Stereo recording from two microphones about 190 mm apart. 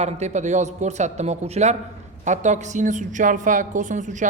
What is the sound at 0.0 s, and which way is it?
A woman's voice, 35° right (ahead or behind).